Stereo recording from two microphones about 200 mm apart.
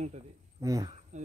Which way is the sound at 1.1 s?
35° right (ahead or behind).